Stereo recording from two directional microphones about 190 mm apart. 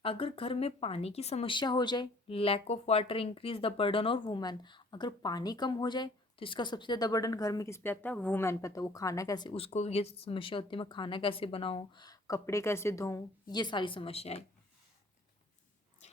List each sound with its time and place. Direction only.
0.0 s speech: 30° left (ahead or behind)